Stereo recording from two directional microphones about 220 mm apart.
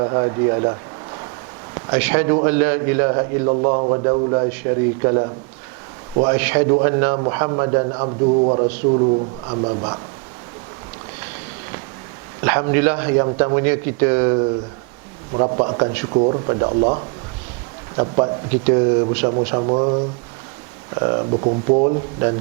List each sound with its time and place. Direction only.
0.0 s a man's voice: 20° right (ahead or behind)
2.0 s a man's voice: 10° right (ahead or behind)
3.5 s a man's voice: 30° right (ahead or behind)
12.4 s a man's voice: 15° right (ahead or behind)
15.3 s a man's voice: 30° right (ahead or behind)
21.8 s a man's voice: 20° right (ahead or behind)